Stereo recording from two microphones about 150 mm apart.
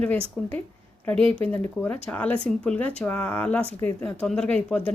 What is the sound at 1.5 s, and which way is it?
Speech, 10° left (ahead or behind).